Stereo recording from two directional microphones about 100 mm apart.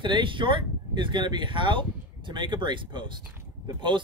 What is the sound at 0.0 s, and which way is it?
Speech, 55° right (ahead or behind).